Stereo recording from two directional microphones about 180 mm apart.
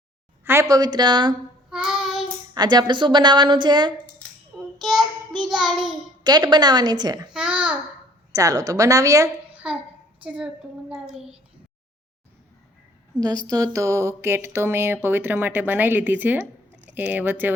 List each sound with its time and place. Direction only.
0.4 s a woman's voice: 15° right (ahead or behind)
1.7 s child singing: centre (ahead or behind)
2.6 s a woman's voice: 25° right (ahead or behind)
4.8 s child singing: centre (ahead or behind)
6.2 s a woman's voice: 25° right (ahead or behind)
7.3 s child singing: 5° right (ahead or behind)
8.3 s a sound: 20° right (ahead or behind)
9.6 s child singing: 5° right (ahead or behind)
13.1 s a woman's voice: 20° right (ahead or behind)
13.5 s a sound: 20° right (ahead or behind)